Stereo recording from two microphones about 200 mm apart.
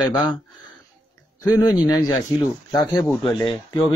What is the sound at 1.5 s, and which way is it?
Speech, 20° left (ahead or behind).